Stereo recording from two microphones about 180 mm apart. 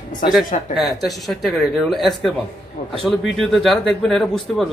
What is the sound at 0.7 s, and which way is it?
A man's voice, centre (ahead or behind).